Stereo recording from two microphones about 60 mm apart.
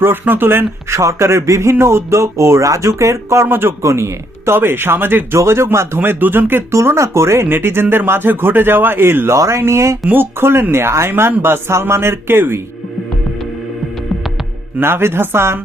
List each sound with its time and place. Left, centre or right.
0.0 s speech: right
0.9 s speech: right
5.3 s speech: right
6.0 s speech: right
6.7 s speech: right
7.4 s speech: right
10.1 s speech: right
11.1 s speech: right
14.8 s speech: right